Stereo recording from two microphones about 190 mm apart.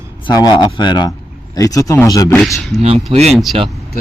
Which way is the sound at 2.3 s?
Centre (ahead or behind).